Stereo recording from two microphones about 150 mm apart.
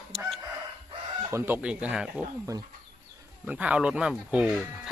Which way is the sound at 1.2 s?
15° right (ahead or behind).